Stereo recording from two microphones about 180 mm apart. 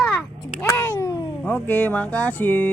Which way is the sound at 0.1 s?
Centre (ahead or behind).